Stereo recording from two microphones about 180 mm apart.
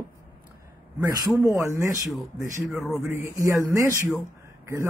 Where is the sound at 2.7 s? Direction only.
Centre (ahead or behind).